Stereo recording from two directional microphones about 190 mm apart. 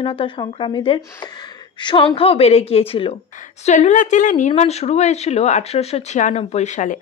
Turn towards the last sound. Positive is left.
turn(degrees=40)  # may be behind; listen again after turning